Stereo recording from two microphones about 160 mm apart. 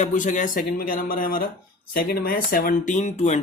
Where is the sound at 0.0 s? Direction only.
50° left (ahead or behind).